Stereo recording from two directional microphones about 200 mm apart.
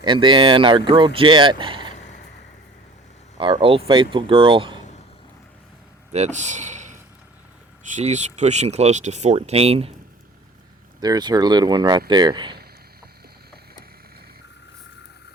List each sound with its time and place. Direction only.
0.0 s speech: 25° right (ahead or behind)
2.0 s vehicle: 35° left (ahead or behind)
3.3 s speech: 25° right (ahead or behind)
6.1 s speech: 35° right (ahead or behind)
7.9 s speech: 35° right (ahead or behind)
11.0 s speech: 20° right (ahead or behind)